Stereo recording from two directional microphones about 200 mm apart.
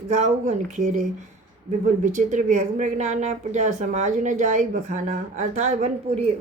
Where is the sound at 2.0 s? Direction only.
40° right (ahead or behind).